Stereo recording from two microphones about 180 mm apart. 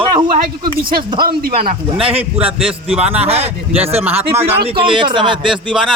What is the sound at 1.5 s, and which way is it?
Speech, 30° right (ahead or behind).